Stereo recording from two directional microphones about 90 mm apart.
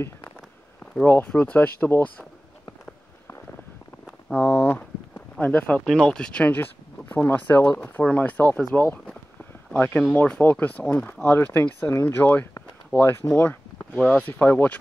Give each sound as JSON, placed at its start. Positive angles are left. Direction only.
{"t": 1.0, "sound": "speech", "side_deg": 20}
{"t": 4.3, "sound": "a sound", "side_deg": 25}
{"t": 5.4, "sound": "speech", "side_deg": 15}